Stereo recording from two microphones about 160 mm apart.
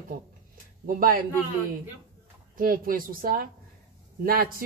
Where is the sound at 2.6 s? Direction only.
60° right (ahead or behind).